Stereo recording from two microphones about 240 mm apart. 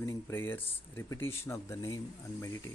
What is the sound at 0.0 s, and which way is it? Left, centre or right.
Speech, centre.